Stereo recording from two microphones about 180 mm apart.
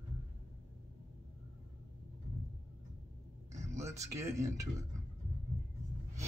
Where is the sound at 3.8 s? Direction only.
15° right (ahead or behind).